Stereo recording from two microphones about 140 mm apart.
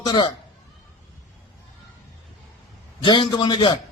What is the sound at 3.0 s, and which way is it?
Speech, 35° left (ahead or behind).